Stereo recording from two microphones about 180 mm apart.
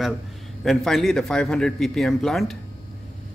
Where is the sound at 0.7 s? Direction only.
Centre (ahead or behind).